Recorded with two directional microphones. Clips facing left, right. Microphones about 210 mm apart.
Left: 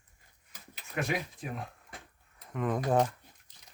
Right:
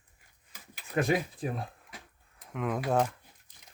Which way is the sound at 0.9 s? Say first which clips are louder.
Right 5 dB; 35° right (ahead or behind).